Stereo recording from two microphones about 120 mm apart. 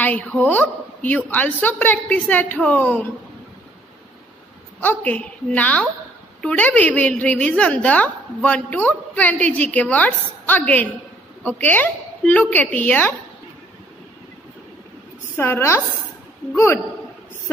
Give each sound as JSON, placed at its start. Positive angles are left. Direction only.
{"t": 0.0, "sound": "a woman's voice", "side_deg": 10}
{"t": 4.8, "sound": "a woman's voice", "side_deg": 10}
{"t": 15.3, "sound": "a woman's voice", "side_deg": 20}